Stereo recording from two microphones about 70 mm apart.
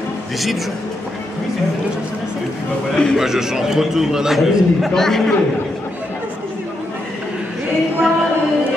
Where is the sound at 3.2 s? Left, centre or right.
Centre.